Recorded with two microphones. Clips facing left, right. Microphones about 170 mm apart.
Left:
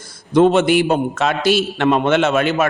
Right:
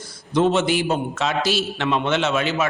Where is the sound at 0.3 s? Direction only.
55° left (ahead or behind).